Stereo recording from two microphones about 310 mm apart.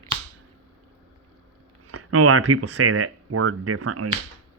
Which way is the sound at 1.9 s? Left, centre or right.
Right.